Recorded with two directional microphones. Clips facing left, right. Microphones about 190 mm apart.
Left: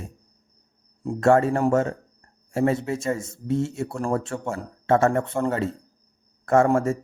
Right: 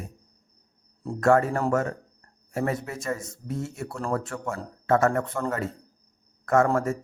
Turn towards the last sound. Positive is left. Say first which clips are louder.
# left 3 dB
turn(degrees=25)  # may be behind; listen again after turning